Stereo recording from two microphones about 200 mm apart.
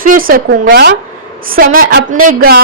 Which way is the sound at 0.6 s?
60° right (ahead or behind).